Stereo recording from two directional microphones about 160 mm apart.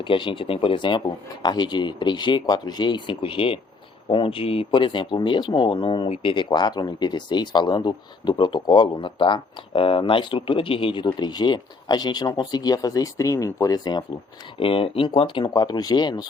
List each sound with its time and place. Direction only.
0.0 s speech: 30° left (ahead or behind)
14.6 s speech: 35° left (ahead or behind)